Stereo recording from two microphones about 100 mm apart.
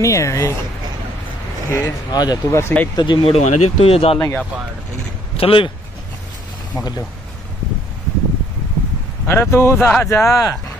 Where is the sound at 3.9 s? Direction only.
75° left (ahead or behind).